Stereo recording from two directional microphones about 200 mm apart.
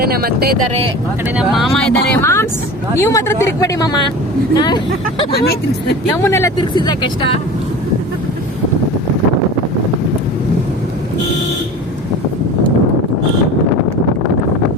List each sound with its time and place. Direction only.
0.0 s speech: 50° right (ahead or behind)
1.4 s speech: centre (ahead or behind); by 4.8 s 20° left (ahead or behind)
5.3 s speech: 50° left (ahead or behind)
6.1 s speech: 15° left (ahead or behind)